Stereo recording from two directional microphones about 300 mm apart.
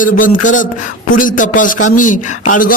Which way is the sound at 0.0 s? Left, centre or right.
Left.